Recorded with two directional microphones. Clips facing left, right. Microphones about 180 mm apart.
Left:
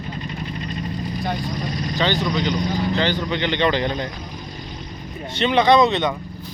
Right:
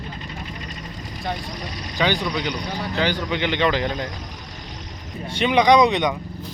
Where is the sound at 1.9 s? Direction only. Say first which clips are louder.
Even; 10° right (ahead or behind).